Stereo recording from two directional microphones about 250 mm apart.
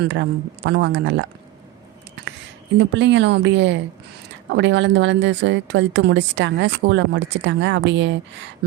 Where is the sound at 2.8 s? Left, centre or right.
Right.